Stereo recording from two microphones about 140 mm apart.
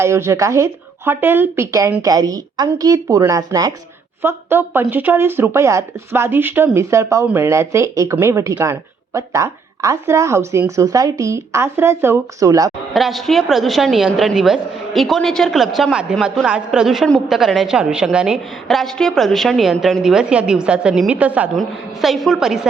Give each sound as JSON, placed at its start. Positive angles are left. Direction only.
{"t": 0.0, "sound": "speech", "side_deg": -20}
{"t": 12.9, "sound": "a woman's voice", "side_deg": 0}
{"t": 21.5, "sound": "a woman's voice", "side_deg": 0}